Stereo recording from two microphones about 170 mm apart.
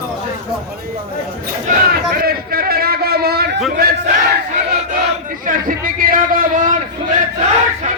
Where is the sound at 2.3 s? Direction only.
60° right (ahead or behind).